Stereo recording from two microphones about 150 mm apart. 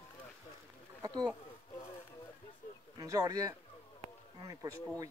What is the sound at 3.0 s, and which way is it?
Speech, 25° right (ahead or behind).